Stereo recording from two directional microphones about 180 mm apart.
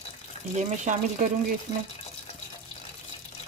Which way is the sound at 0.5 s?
40° right (ahead or behind).